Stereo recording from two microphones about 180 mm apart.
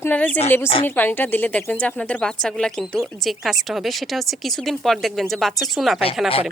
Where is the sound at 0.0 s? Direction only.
10° left (ahead or behind).